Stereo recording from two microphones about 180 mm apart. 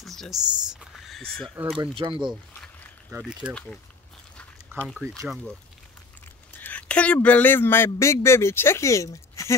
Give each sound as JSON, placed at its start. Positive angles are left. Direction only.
{"t": 0.0, "sound": "a sound", "side_deg": 0}
{"t": 1.8, "sound": "speech", "side_deg": -25}
{"t": 3.2, "sound": "speech", "side_deg": -5}
{"t": 4.7, "sound": "liquid", "side_deg": -15}
{"t": 5.3, "sound": "speech", "side_deg": 5}
{"t": 6.6, "sound": "speech", "side_deg": 10}